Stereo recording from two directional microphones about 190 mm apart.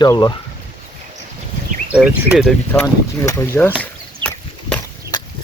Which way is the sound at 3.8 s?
5° left (ahead or behind).